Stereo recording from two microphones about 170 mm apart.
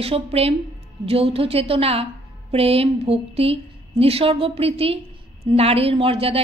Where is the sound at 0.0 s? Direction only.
35° right (ahead or behind).